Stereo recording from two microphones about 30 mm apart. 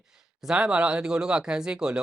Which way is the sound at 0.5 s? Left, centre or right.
Right.